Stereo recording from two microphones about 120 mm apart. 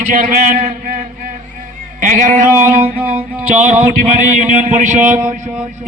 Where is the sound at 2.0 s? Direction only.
90° right.